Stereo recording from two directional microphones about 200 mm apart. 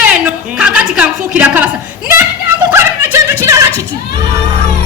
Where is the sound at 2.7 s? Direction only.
10° right (ahead or behind).